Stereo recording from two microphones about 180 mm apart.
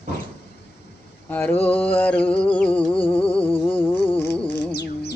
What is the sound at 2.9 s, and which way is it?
Music, 30° left (ahead or behind).